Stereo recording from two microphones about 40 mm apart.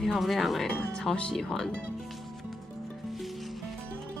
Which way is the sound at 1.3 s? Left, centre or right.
Centre.